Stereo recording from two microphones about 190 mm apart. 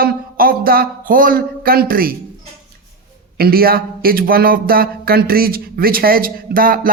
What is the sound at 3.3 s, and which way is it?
Speech, 55° right (ahead or behind).